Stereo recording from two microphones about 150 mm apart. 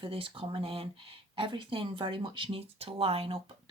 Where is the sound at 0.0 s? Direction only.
35° right (ahead or behind).